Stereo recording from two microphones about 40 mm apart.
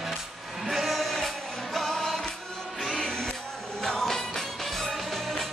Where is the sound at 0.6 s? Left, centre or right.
Centre.